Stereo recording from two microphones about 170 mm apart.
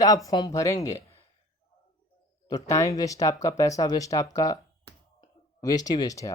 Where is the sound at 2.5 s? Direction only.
20° left (ahead or behind).